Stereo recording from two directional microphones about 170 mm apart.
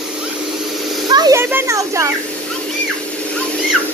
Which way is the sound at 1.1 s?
25° right (ahead or behind).